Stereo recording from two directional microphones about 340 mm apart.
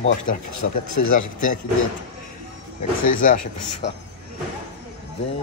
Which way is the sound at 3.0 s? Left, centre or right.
Left.